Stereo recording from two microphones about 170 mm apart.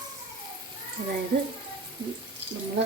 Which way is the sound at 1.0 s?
50° right (ahead or behind).